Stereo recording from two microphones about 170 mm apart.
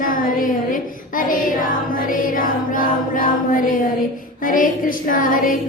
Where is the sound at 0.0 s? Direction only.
55° left (ahead or behind).